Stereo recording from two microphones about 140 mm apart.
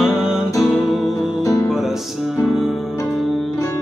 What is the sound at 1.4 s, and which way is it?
Music, 25° left (ahead or behind).